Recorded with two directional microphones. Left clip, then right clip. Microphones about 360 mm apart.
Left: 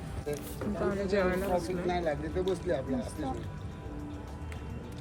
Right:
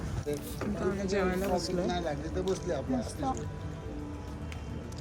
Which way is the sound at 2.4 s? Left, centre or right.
Left.